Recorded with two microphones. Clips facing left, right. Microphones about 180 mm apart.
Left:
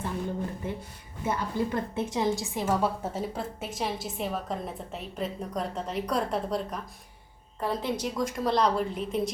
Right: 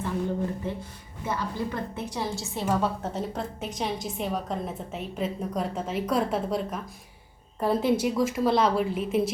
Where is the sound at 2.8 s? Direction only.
5° left (ahead or behind).